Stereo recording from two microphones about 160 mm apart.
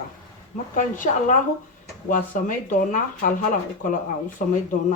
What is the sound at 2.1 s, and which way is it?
Speech, 55° left (ahead or behind).